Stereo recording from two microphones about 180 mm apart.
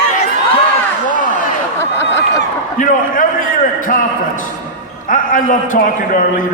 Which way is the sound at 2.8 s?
50° left (ahead or behind).